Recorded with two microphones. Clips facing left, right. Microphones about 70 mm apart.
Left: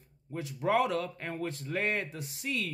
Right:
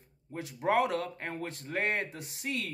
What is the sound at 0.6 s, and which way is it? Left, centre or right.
A man's voice, right.